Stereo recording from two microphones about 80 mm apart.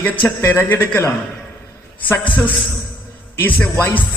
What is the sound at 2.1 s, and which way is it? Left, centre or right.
Speech, left.